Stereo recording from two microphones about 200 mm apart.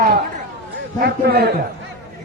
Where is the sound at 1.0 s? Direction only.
50° right (ahead or behind).